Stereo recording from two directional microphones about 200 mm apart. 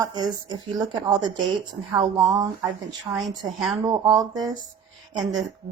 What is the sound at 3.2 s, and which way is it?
Speech, centre (ahead or behind).